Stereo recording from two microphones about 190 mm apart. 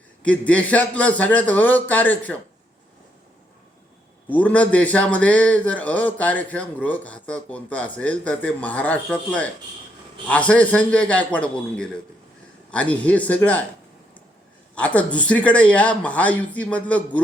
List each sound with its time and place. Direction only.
0.2 s speech: 5° left (ahead or behind)
4.3 s speech: 5° left (ahead or behind)
14.8 s speech: 5° left (ahead or behind)